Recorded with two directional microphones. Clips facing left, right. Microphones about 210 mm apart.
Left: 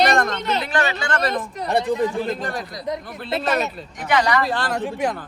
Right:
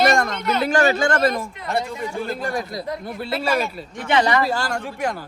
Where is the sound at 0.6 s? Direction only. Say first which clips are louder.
Right 6 dB; 45° right (ahead or behind).